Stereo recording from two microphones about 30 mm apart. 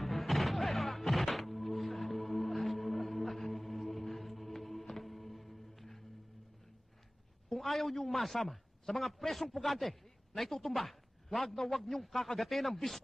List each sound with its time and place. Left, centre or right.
0.0 s music: centre
7.5 s a man's voice: centre